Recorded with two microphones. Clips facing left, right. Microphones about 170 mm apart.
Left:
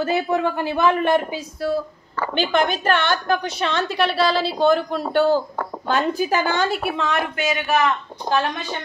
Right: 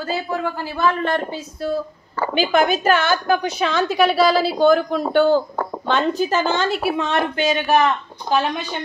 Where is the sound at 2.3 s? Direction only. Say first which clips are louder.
Right 3 dB; 5° right (ahead or behind).